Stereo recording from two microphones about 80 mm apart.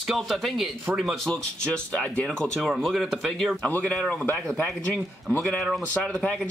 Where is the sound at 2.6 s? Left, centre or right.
Centre.